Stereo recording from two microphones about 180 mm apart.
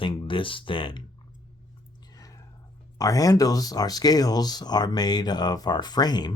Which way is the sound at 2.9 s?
20° left (ahead or behind).